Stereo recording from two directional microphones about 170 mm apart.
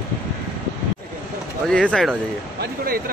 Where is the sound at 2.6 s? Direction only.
60° right (ahead or behind).